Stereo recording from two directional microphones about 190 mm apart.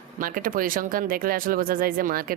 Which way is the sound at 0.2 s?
50° right (ahead or behind).